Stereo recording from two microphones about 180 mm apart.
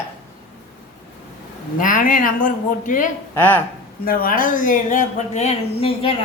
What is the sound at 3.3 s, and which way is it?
Speech, 10° left (ahead or behind).